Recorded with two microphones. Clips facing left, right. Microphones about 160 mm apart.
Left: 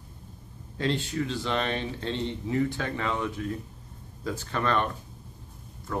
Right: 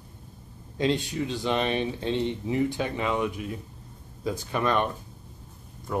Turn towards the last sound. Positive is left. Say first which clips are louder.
# right 3 dB
turn(degrees=-15)  # may be behind; listen again after turning